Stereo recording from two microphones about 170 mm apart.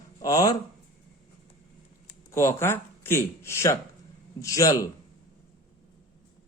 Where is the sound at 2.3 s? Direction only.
15° left (ahead or behind).